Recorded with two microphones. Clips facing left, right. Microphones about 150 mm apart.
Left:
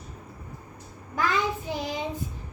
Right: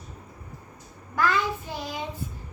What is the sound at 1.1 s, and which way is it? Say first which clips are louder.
Child singing: right 1 dB; 15° left (ahead or behind).